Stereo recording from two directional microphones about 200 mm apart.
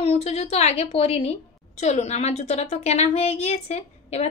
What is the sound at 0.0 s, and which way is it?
A woman's voice, 30° left (ahead or behind).